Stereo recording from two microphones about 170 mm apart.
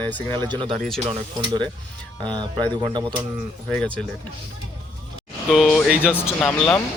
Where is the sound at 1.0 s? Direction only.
25° right (ahead or behind).